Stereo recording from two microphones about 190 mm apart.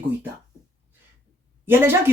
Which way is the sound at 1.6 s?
10° right (ahead or behind).